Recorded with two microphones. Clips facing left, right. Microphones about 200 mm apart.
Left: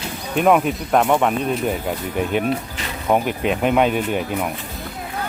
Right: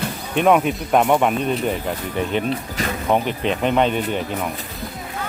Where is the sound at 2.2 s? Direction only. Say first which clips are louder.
Left 2 dB; 10° left (ahead or behind).